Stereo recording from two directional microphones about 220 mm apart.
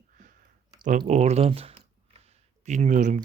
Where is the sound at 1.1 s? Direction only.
30° right (ahead or behind).